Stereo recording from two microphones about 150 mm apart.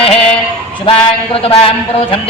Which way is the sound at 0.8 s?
35° left (ahead or behind).